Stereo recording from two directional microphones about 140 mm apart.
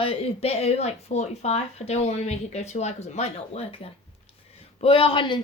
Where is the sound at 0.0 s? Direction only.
40° left (ahead or behind).